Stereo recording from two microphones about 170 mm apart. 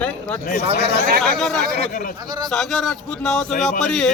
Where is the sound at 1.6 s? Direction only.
65° right (ahead or behind).